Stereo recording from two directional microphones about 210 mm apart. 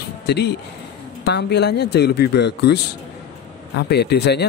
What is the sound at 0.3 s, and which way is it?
A man's voice, 50° left (ahead or behind).